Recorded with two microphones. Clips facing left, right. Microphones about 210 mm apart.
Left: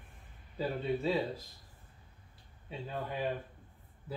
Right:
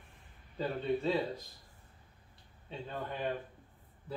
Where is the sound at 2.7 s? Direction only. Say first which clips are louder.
Left 1 dB; 5° left (ahead or behind).